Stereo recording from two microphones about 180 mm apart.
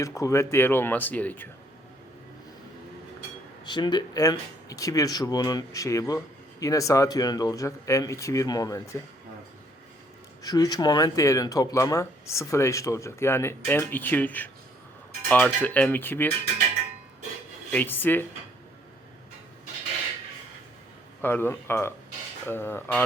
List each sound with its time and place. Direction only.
0.0 s speech: 15° left (ahead or behind)
3.7 s speech: 25° left (ahead or behind)
10.4 s speech: 20° left (ahead or behind)
17.7 s speech: 10° left (ahead or behind)
21.2 s speech: 10° left (ahead or behind)